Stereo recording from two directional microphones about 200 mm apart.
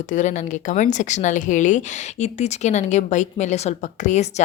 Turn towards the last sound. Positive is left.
turn(degrees=35)  # may be behind; listen again after turning